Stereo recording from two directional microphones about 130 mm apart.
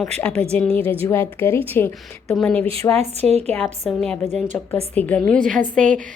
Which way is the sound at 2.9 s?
55° right (ahead or behind).